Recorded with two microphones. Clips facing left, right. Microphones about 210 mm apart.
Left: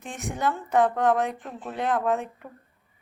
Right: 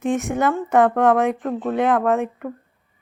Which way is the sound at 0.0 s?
45° right (ahead or behind).